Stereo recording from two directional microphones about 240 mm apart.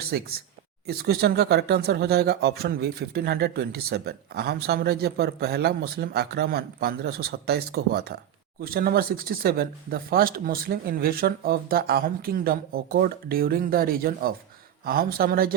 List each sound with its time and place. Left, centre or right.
0.1 s speech: right